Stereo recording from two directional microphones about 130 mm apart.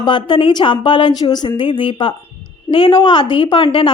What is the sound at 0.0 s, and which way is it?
A woman's voice, 35° left (ahead or behind).